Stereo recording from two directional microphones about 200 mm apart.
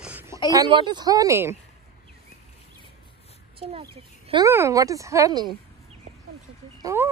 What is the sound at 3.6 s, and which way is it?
Speech, 30° right (ahead or behind).